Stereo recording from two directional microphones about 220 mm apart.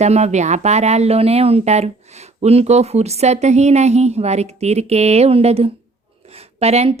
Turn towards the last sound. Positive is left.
turn(degrees=-30)  # may be behind; listen again after turning